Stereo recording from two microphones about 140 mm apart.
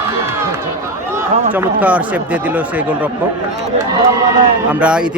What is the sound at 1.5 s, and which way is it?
Speech, 10° right (ahead or behind).